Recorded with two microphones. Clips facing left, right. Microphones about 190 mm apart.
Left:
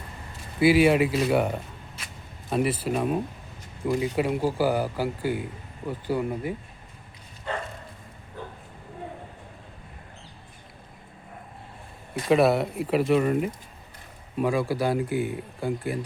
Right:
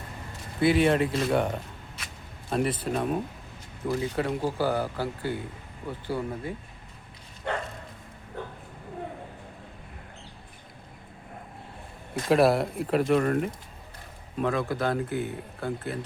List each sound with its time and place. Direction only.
0.6 s speech: 5° left (ahead or behind)
7.5 s bow-wow: 65° right (ahead or behind)
12.3 s speech: centre (ahead or behind)